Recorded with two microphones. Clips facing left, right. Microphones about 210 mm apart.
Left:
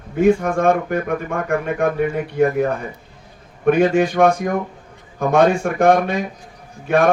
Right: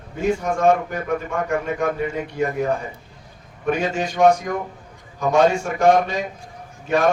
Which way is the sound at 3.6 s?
55° left (ahead or behind).